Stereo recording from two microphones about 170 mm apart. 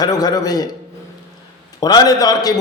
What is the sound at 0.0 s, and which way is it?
Speech, 25° left (ahead or behind).